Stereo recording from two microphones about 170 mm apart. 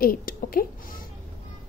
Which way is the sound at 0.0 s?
55° left (ahead or behind).